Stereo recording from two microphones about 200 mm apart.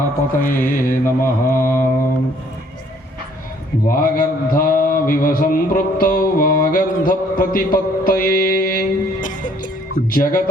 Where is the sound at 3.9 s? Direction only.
45° left (ahead or behind).